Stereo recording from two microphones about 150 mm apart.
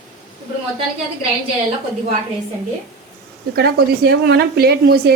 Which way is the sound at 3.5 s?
90° right.